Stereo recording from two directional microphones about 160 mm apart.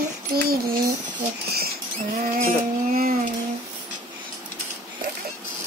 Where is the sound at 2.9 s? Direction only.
65° right (ahead or behind).